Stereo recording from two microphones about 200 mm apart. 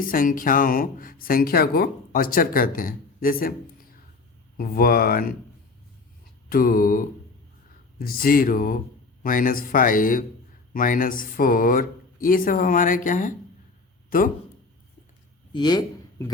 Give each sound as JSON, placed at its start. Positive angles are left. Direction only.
{"t": 0.1, "sound": "speech", "side_deg": 45}
{"t": 4.5, "sound": "speech", "side_deg": 45}
{"t": 6.5, "sound": "speech", "side_deg": 45}
{"t": 15.5, "sound": "speech", "side_deg": 20}